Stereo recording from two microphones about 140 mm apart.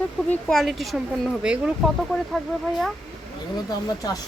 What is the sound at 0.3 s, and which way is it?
Speech, 5° left (ahead or behind).